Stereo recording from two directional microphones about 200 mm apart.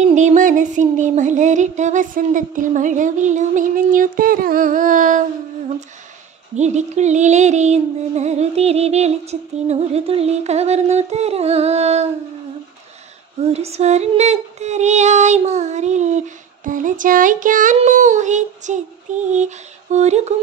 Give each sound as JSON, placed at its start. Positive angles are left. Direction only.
{"t": 0.0, "sound": "music", "side_deg": -35}
{"t": 6.5, "sound": "music", "side_deg": -35}
{"t": 13.4, "sound": "music", "side_deg": -30}